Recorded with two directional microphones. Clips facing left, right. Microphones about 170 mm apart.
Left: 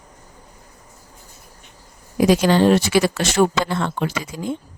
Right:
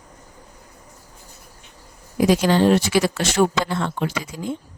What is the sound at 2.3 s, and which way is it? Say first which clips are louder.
Speech: left 2 dB; 85° left.